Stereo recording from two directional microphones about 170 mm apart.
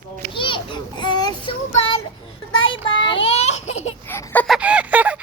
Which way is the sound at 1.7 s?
35° left (ahead or behind).